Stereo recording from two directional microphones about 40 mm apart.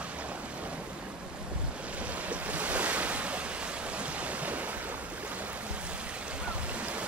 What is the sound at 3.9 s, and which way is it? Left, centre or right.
Stream, right.